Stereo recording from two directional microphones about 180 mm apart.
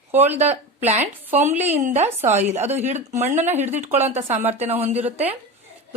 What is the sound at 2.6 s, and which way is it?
Speech, 35° right (ahead or behind).